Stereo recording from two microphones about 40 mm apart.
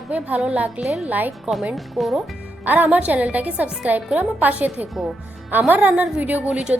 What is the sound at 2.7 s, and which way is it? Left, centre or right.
A woman's voice, right.